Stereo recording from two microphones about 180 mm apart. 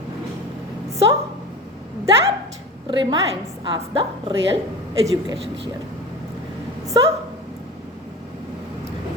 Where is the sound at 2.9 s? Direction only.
25° right (ahead or behind).